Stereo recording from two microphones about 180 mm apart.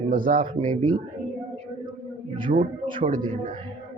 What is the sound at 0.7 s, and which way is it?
Speech, 30° right (ahead or behind).